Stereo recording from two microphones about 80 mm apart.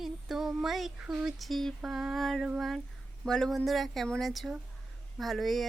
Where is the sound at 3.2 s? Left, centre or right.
Centre.